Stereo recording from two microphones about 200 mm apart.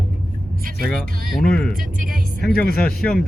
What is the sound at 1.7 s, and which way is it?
Speech, 45° right (ahead or behind).